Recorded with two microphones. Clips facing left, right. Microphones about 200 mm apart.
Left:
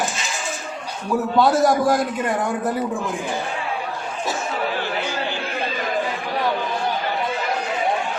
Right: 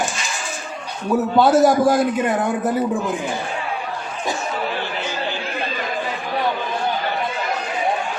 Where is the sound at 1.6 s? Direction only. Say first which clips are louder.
Right 3 dB; centre (ahead or behind).